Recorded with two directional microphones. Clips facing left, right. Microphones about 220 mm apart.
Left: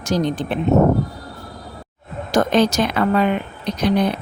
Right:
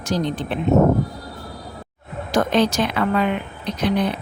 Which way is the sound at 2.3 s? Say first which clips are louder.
Left 2 dB; 45° left (ahead or behind).